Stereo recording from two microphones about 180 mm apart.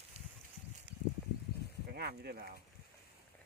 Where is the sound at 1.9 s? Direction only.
60° right (ahead or behind).